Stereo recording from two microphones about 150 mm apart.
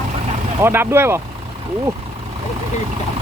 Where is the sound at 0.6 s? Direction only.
15° right (ahead or behind).